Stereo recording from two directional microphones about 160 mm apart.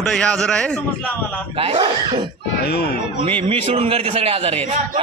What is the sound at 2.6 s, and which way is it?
Speech, 90° left.